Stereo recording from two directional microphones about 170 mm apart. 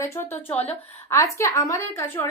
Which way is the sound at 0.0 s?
15° left (ahead or behind).